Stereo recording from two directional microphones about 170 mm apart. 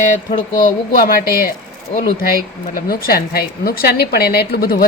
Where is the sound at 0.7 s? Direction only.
60° left (ahead or behind).